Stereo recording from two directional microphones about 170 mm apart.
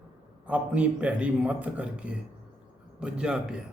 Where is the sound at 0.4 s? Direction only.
10° right (ahead or behind).